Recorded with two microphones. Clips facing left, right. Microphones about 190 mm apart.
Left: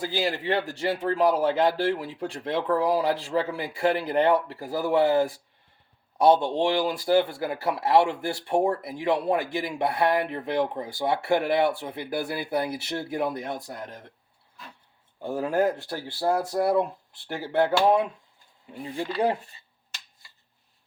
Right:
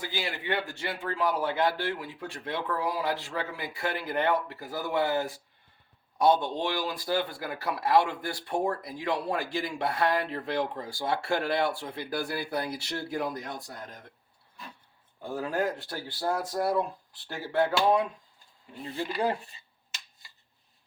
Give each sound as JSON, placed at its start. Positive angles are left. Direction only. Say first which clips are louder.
{"t": 0.0, "sound": "speech", "louder": "left 7 dB", "side_deg": 35}
{"t": 15.2, "sound": "speech", "louder": "left 6 dB", "side_deg": 25}